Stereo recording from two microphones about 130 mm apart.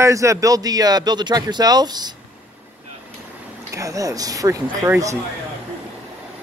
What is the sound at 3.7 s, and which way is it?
Speech, 25° right (ahead or behind).